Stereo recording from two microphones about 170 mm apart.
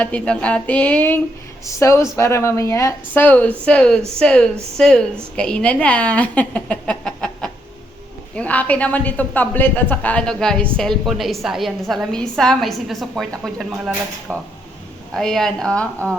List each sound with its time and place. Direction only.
0.0 s a woman's voice: 10° left (ahead or behind)